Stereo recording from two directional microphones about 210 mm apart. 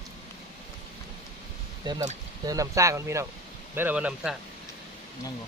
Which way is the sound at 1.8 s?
20° right (ahead or behind).